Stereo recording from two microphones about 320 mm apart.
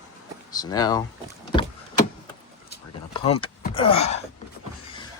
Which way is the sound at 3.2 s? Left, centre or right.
Centre.